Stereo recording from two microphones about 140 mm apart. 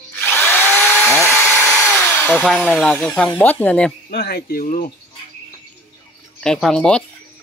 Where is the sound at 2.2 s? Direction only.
10° left (ahead or behind).